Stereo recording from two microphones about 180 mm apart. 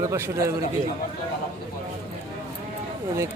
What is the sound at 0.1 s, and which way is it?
Speech, 15° right (ahead or behind).